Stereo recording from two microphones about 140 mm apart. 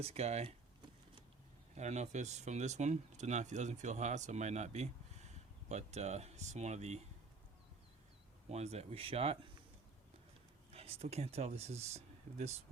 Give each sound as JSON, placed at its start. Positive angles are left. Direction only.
{"t": 0.0, "sound": "speech", "side_deg": -50}
{"t": 1.7, "sound": "speech", "side_deg": -55}
{"t": 8.4, "sound": "speech", "side_deg": -50}
{"t": 10.7, "sound": "speech", "side_deg": -45}